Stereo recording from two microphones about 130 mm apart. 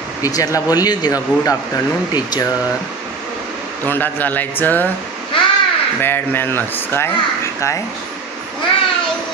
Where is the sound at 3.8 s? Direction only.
15° left (ahead or behind).